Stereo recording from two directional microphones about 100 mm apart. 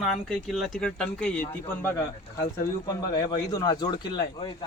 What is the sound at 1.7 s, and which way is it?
Speech, 20° left (ahead or behind).